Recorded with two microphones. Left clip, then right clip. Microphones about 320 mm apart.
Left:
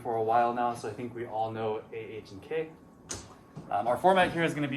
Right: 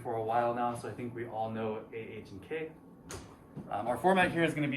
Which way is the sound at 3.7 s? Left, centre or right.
Centre.